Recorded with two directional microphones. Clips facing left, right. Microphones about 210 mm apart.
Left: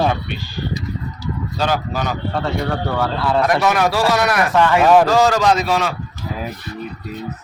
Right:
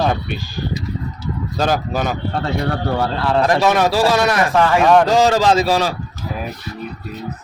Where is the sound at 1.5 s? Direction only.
45° right (ahead or behind).